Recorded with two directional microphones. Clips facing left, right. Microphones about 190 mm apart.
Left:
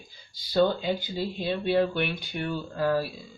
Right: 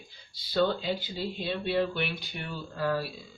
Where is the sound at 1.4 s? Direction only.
45° left (ahead or behind).